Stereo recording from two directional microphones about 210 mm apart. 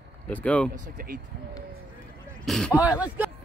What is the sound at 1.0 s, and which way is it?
Speech, 45° right (ahead or behind).